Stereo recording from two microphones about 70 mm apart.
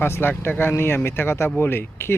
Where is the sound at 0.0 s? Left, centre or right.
Left.